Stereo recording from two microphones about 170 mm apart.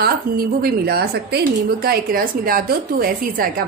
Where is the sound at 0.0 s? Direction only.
60° right (ahead or behind).